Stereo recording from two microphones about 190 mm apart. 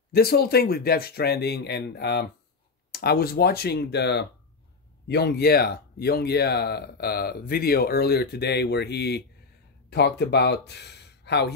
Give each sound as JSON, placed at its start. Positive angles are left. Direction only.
{"t": 0.1, "sound": "speech", "side_deg": 55}